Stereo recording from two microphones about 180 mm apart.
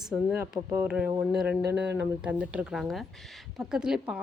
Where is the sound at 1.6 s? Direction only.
70° right (ahead or behind).